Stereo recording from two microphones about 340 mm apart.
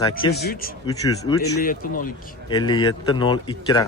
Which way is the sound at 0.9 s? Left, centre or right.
Centre.